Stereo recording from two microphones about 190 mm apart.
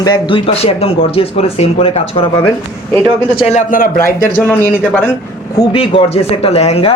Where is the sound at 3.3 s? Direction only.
30° left (ahead or behind).